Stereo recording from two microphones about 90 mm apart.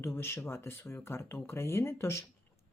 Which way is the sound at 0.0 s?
25° left (ahead or behind).